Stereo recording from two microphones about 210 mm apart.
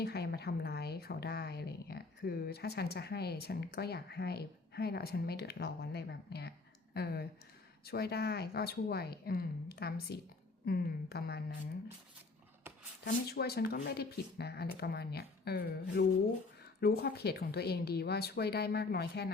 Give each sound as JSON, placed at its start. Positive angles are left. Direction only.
{"t": 0.0, "sound": "a woman's voice", "side_deg": 50}
{"t": 13.1, "sound": "a woman's voice", "side_deg": 50}